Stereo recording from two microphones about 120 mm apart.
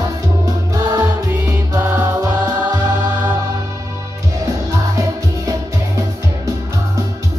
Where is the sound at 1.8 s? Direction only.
15° right (ahead or behind).